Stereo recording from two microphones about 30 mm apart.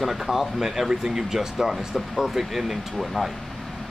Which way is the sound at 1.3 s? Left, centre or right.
Centre.